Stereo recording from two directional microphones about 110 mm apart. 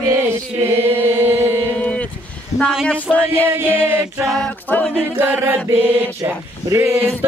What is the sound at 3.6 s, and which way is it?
Speech, 20° right (ahead or behind).